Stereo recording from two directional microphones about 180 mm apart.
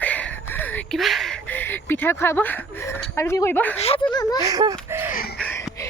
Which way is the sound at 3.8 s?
35° left (ahead or behind).